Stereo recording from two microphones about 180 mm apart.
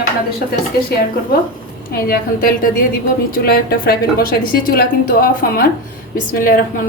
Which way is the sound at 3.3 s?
55° left (ahead or behind).